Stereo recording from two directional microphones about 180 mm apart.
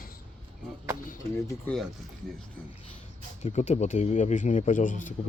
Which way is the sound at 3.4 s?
40° left (ahead or behind).